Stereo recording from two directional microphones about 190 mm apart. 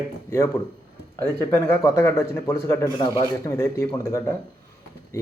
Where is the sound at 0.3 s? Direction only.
15° left (ahead or behind).